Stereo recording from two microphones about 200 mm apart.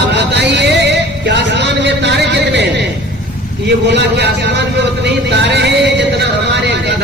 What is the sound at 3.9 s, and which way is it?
Speech, 55° right (ahead or behind).